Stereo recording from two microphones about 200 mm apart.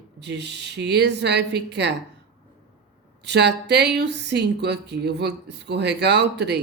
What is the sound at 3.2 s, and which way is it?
Speech, 60° right (ahead or behind).